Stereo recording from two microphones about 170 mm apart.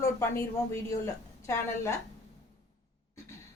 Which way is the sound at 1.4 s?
15° left (ahead or behind).